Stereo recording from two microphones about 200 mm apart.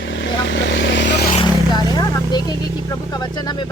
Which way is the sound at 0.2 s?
65° left (ahead or behind).